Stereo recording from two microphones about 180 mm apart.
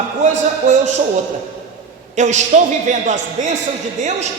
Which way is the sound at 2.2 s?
40° right (ahead or behind).